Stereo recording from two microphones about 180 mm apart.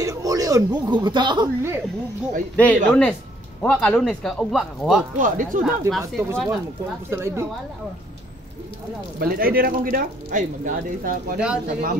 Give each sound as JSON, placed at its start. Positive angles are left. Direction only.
{"t": 0.0, "sound": "speech", "side_deg": -20}
{"t": 2.5, "sound": "speech", "side_deg": 10}
{"t": 5.2, "sound": "speech", "side_deg": -50}
{"t": 5.7, "sound": "speech", "side_deg": 0}
{"t": 7.1, "sound": "a woman's voice", "side_deg": -15}
{"t": 9.2, "sound": "speech", "side_deg": -55}
{"t": 11.3, "sound": "speech", "side_deg": -5}